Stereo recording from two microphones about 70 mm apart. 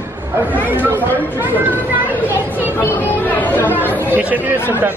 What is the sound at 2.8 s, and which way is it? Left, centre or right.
Speech, left.